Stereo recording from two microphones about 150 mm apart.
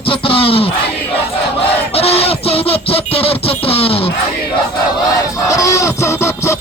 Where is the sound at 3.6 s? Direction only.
40° left (ahead or behind).